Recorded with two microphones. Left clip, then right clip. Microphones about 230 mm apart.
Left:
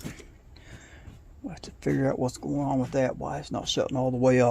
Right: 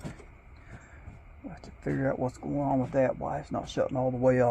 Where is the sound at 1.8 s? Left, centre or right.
Left.